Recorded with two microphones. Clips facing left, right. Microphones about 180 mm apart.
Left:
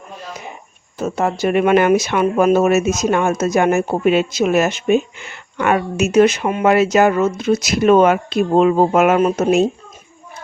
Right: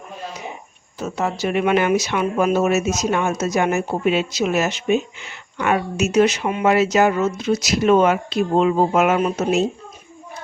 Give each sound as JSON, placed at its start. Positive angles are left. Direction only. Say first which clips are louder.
{"t": 0.9, "sound": "speech", "louder": "left 4 dB", "side_deg": 50}